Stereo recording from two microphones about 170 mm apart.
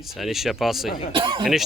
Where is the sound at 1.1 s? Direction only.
30° right (ahead or behind).